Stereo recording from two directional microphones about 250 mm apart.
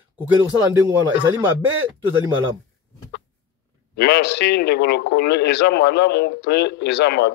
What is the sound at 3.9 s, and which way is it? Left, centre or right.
A man's voice, left.